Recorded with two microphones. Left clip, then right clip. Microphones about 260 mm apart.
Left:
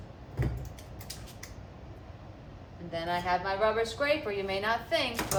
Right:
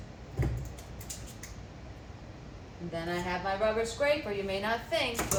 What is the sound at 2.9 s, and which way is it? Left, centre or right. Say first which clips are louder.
Speech: left 4 dB; centre.